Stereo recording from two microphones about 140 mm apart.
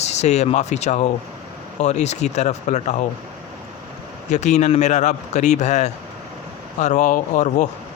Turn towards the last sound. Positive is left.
turn(degrees=60)  # may be behind; listen again after turning